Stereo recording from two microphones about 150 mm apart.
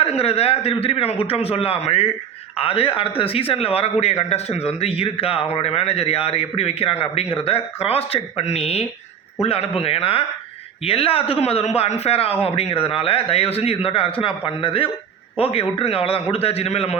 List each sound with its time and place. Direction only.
0.0 s a man's voice: 40° left (ahead or behind)